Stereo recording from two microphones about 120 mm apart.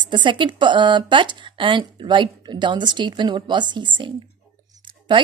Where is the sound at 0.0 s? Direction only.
40° right (ahead or behind).